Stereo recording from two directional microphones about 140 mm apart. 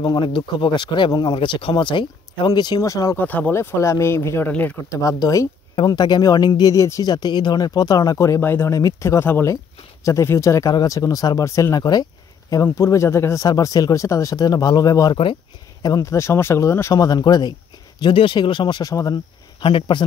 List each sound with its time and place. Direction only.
0.0 s speech: 35° left (ahead or behind)
3.3 s speech: 10° left (ahead or behind)
5.0 s speech: 25° left (ahead or behind)
19.6 s speech: 35° left (ahead or behind)